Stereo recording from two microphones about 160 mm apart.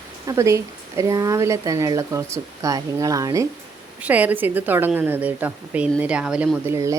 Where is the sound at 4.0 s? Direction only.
10° right (ahead or behind).